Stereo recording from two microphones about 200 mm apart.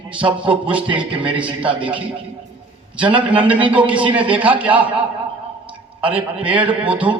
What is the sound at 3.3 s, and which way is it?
Speech, 5° right (ahead or behind).